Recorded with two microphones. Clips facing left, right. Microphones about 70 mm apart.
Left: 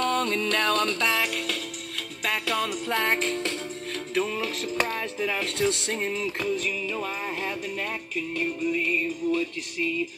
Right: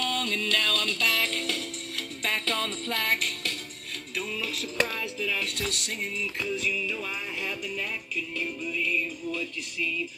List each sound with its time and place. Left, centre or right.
0.0 s music: left
1.2 s music: centre
2.9 s music: left
4.1 s speech: left
6.0 s music: left
8.4 s speech: left